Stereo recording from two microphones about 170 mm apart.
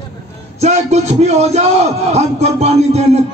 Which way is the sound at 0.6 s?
40° right (ahead or behind).